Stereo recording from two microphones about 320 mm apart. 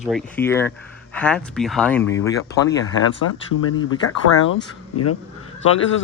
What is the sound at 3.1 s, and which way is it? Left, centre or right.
Speech, left.